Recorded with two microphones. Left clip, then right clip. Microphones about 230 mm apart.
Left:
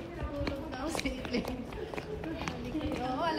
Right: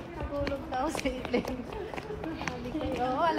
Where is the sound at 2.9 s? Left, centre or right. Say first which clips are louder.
Right 6 dB; centre.